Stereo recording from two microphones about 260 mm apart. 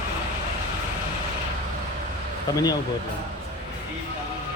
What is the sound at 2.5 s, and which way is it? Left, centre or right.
Speech, centre.